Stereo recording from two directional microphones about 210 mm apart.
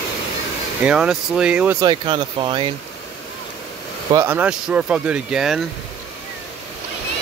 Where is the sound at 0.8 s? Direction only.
5° right (ahead or behind).